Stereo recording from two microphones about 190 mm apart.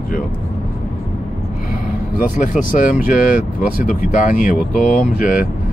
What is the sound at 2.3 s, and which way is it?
Speech, 45° left (ahead or behind).